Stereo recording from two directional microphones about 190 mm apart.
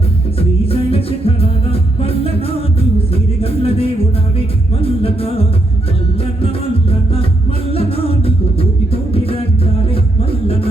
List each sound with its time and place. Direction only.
0.3 s music: 30° left (ahead or behind)